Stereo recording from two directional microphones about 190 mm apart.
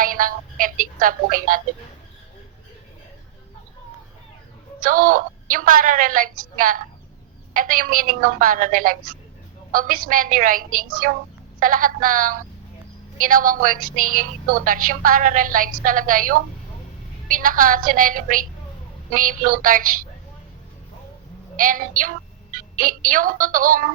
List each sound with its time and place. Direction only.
0.0 s music: 45° right (ahead or behind)
4.8 s a woman's voice: 45° right (ahead or behind)
21.5 s a woman's voice: 45° right (ahead or behind)